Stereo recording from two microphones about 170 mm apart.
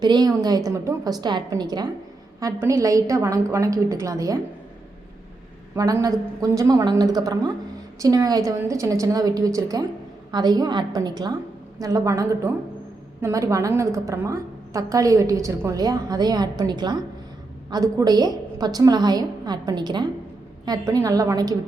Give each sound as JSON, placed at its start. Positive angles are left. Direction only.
{"t": 0.0, "sound": "a woman's voice", "side_deg": -25}
{"t": 5.7, "sound": "a woman's voice", "side_deg": -20}